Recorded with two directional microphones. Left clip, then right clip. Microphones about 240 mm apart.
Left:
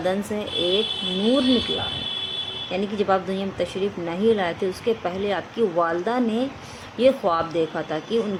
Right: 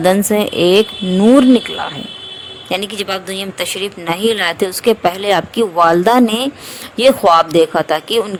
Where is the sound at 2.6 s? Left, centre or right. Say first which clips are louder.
Right 5 dB; right.